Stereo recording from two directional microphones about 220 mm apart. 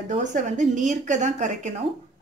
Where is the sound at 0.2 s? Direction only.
35° right (ahead or behind).